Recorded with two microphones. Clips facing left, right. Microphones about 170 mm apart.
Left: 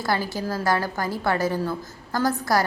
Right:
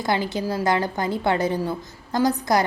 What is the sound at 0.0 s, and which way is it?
A woman's voice, 20° right (ahead or behind).